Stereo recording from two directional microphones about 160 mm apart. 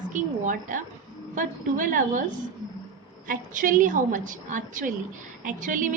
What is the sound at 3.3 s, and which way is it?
A woman's voice, 55° right (ahead or behind).